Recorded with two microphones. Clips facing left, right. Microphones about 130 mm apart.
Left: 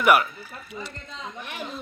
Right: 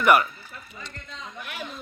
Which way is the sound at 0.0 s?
5° left (ahead or behind).